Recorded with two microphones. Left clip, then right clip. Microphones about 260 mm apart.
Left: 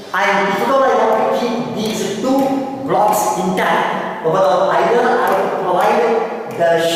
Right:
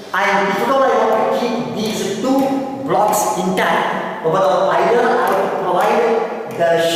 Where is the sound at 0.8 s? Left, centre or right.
Centre.